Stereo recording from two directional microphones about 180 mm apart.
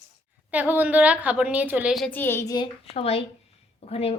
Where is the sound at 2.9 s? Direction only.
35° left (ahead or behind).